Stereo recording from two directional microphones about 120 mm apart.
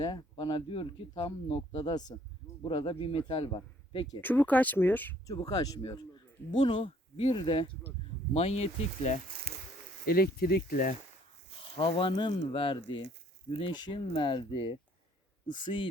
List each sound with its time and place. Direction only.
0.0 s speech: 40° left (ahead or behind)
1.7 s speech: 35° left (ahead or behind)
4.2 s speech: 15° left (ahead or behind)
5.2 s speech: 35° left (ahead or behind)
6.6 s speech: 45° left (ahead or behind)
8.3 s speech: 60° left (ahead or behind)
11.8 s speech: 45° left (ahead or behind)